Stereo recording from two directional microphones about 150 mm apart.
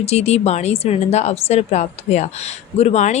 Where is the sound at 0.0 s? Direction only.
45° left (ahead or behind).